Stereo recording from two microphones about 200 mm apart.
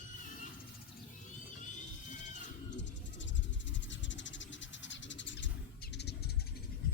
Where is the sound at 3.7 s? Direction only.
65° left (ahead or behind).